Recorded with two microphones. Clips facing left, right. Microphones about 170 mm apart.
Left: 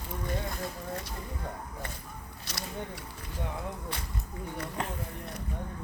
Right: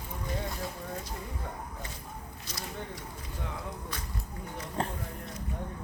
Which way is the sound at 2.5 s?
70° left (ahead or behind).